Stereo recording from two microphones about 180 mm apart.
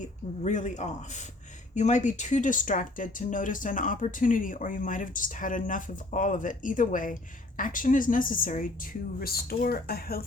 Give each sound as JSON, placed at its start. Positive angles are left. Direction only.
{"t": 0.4, "sound": "speech", "side_deg": 40}